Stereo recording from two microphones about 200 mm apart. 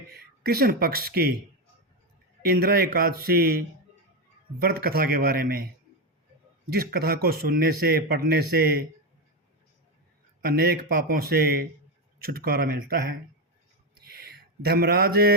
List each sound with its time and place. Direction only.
0.1 s speech: 50° right (ahead or behind)
2.4 s speech: 50° right (ahead or behind)
4.6 s speech: 50° right (ahead or behind)
6.7 s speech: 50° right (ahead or behind)
10.4 s speech: 50° right (ahead or behind)
14.0 s a sound: 50° right (ahead or behind)
14.7 s speech: 50° right (ahead or behind)